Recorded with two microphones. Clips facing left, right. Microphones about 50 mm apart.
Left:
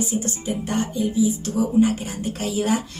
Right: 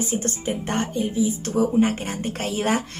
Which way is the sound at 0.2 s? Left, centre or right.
Right.